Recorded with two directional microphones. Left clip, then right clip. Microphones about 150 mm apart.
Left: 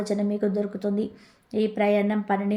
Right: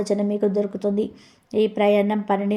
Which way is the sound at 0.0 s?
20° right (ahead or behind).